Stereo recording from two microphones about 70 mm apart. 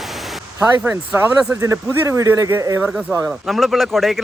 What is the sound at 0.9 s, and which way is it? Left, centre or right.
Speech, right.